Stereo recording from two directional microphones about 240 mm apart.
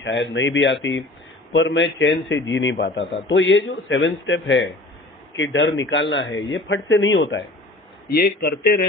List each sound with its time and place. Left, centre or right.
0.0 s a man's voice: left